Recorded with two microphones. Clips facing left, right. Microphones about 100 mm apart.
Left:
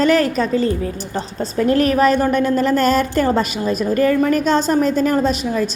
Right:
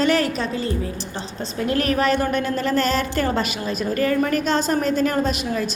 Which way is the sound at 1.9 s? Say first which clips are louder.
Left 5 dB; 40° left (ahead or behind).